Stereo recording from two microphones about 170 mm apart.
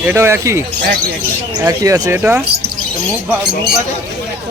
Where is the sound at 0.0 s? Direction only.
15° right (ahead or behind).